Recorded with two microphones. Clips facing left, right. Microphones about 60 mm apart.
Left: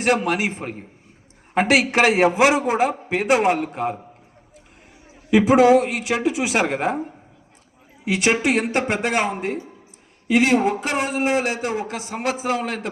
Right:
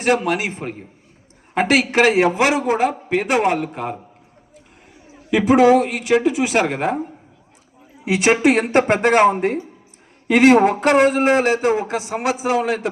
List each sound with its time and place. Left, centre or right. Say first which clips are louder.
0.0 s a man's voice: right 1 dB; centre
5.3 s speech: right 1 dB; centre
8.0 s a man's voice: right 4 dB; right
12.0 s a man's voice: right 3 dB; centre